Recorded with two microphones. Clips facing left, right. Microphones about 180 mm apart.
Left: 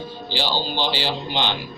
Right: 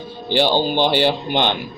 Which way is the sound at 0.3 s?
55° right (ahead or behind).